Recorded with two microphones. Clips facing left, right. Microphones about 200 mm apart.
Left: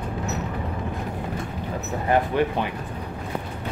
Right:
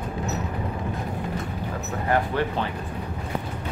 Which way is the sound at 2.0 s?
15° left (ahead or behind).